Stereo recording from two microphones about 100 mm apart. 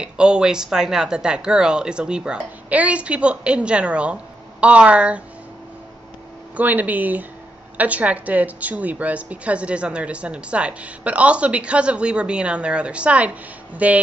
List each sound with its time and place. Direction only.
0.0 s a woman's voice: 10° right (ahead or behind)
6.5 s a woman's voice: 15° right (ahead or behind)